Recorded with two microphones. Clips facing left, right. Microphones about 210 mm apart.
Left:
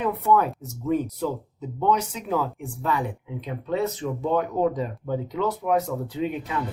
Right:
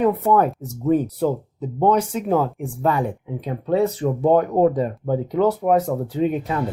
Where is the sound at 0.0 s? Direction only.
50° right (ahead or behind).